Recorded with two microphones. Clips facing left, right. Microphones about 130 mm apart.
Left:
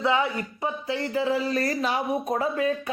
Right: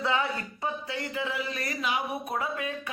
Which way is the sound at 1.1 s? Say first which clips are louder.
Left 10 dB; 35° left (ahead or behind).